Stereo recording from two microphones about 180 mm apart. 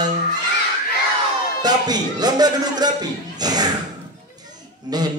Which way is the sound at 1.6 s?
20° right (ahead or behind).